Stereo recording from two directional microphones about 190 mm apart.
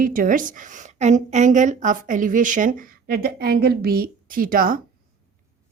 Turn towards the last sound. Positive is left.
turn(degrees=-45)  # may be behind; listen again after turning